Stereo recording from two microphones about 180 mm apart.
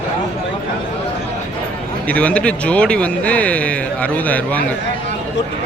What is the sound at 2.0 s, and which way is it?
Speech, 5° left (ahead or behind).